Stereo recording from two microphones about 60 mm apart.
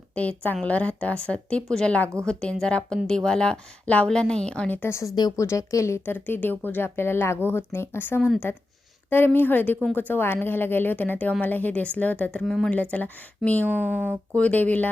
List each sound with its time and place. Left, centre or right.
0.1 s a woman's voice: left
4.9 s speech: left
6.1 s speech: left
6.8 s a woman's voice: left
13.7 s speech: right
14.3 s a woman's voice: left